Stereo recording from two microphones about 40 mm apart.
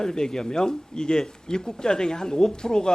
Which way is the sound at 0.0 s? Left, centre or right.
Centre.